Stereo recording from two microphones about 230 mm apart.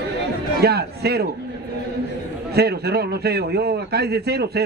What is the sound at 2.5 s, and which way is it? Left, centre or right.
A man's voice, right.